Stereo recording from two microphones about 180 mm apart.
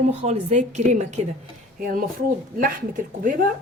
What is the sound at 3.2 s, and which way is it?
Speech, 50° right (ahead or behind).